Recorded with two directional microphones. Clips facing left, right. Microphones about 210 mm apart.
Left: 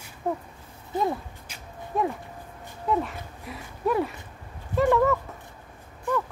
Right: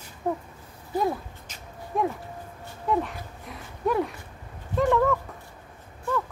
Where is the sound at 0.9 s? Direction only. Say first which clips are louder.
Right 1 dB; 20° left (ahead or behind).